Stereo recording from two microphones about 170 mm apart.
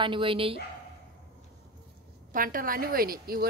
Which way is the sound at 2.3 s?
55° right (ahead or behind).